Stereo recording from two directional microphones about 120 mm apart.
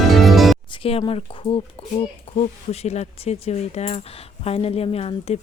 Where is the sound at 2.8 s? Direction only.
65° left (ahead or behind).